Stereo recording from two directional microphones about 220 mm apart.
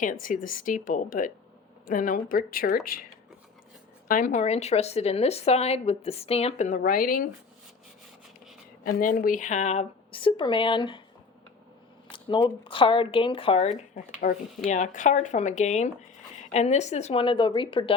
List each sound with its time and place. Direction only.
0.0 s speech: 35° left (ahead or behind)
4.1 s a woman's voice: 35° left (ahead or behind)
8.9 s a woman's voice: 40° left (ahead or behind); by 11.0 s 20° left (ahead or behind)
12.1 s a woman's voice: 20° left (ahead or behind)